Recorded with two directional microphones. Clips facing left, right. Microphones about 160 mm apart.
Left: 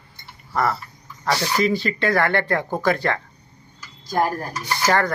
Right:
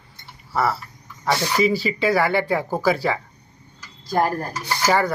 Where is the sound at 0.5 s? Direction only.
5° right (ahead or behind).